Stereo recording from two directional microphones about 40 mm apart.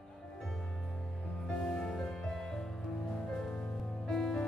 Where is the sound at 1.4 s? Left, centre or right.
Centre.